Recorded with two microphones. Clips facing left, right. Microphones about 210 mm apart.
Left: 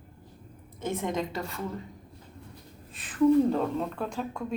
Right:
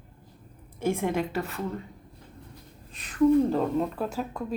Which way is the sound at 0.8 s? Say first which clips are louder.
Right 4 dB; 10° right (ahead or behind).